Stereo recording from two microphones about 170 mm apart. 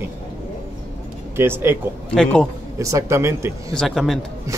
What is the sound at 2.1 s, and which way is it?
Speech, 5° left (ahead or behind).